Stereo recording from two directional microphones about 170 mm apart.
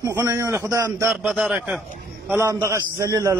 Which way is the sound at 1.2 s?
5° right (ahead or behind).